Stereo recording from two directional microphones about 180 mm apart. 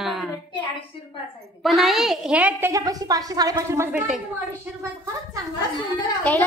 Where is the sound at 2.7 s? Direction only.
20° right (ahead or behind).